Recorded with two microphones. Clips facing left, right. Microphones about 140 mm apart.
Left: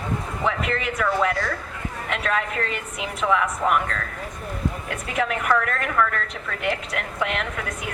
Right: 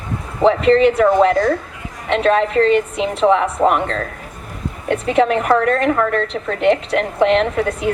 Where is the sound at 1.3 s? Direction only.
45° right (ahead or behind).